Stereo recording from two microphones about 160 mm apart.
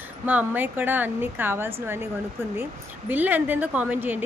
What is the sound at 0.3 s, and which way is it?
A woman's voice, 10° right (ahead or behind).